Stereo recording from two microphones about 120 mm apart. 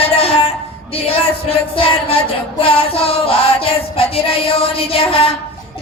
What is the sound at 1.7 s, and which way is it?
Music, 50° left (ahead or behind).